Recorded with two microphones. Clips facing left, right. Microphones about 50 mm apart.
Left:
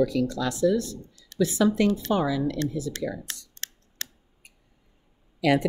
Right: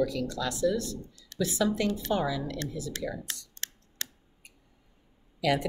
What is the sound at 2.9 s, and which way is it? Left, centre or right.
Computer keyboard, left.